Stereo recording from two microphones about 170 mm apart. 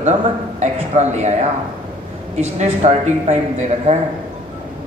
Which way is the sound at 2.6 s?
40° right (ahead or behind).